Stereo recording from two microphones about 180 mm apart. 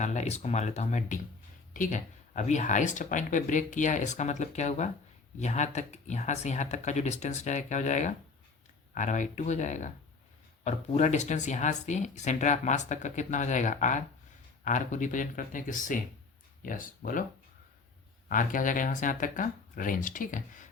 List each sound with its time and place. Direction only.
0.0 s speech: 40° left (ahead or behind)
18.3 s speech: 50° left (ahead or behind)